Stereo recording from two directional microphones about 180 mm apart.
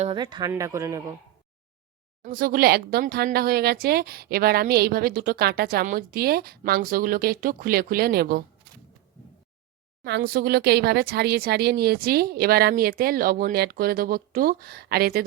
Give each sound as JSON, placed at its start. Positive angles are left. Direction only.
{"t": 0.0, "sound": "speech", "side_deg": -25}
{"t": 2.2, "sound": "speech", "side_deg": -50}
{"t": 10.0, "sound": "speech", "side_deg": -65}